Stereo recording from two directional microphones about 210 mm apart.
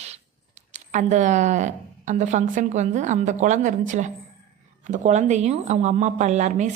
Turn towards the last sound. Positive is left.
turn(degrees=-35)  # may be behind; listen again after turning